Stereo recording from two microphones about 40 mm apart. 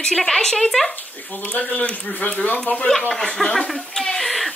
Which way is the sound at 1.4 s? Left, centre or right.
Left.